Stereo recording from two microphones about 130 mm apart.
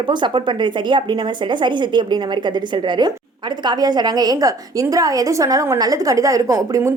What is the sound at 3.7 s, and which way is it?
A woman's voice, 30° right (ahead or behind).